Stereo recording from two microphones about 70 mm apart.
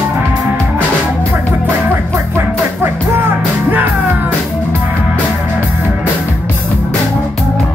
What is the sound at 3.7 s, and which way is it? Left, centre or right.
Music, right.